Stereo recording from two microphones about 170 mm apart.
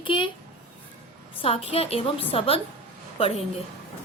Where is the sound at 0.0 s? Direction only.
30° left (ahead or behind).